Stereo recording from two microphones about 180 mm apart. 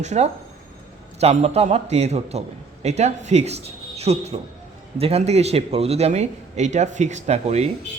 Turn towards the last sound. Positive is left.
turn(degrees=-35)  # may be behind; listen again after turning